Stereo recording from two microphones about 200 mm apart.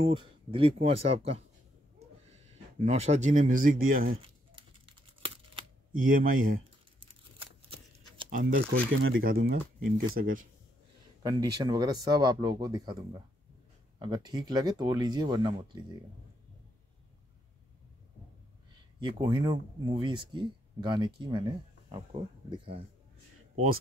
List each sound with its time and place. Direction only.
0.0 s speech: 25° right (ahead or behind)
2.8 s speech: 35° right (ahead or behind)
4.6 s typing: 25° right (ahead or behind)
5.9 s speech: 45° right (ahead or behind)
7.0 s a sound: 25° right (ahead or behind)
8.5 s speech: 75° right (ahead or behind)
9.2 s speech: 50° right (ahead or behind)
11.2 s speech: 20° right (ahead or behind)
18.8 s speech: 20° right (ahead or behind)